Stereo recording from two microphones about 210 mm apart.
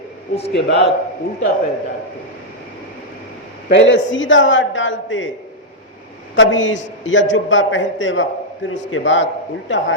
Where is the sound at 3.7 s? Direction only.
60° left (ahead or behind).